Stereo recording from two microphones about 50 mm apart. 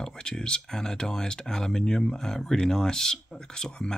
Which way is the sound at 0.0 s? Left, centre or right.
Centre.